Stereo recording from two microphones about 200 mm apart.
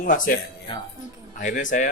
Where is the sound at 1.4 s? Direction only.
40° left (ahead or behind).